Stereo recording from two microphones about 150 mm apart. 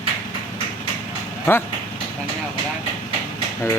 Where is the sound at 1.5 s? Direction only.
15° left (ahead or behind).